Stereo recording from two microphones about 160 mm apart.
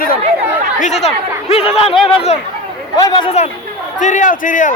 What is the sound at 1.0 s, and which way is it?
Speech, 40° left (ahead or behind).